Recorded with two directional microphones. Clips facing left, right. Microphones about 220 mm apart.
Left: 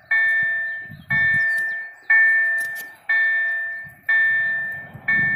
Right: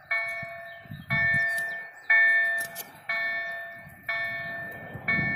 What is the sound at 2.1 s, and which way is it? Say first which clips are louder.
Clock: left 3 dB; 35° right (ahead or behind).